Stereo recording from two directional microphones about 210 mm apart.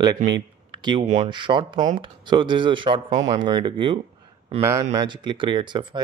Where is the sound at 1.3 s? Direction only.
20° right (ahead or behind).